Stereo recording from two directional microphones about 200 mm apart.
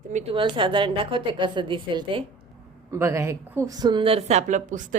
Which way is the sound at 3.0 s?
15° right (ahead or behind).